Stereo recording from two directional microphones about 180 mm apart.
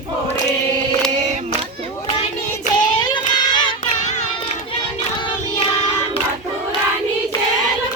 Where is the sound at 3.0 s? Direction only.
25° left (ahead or behind).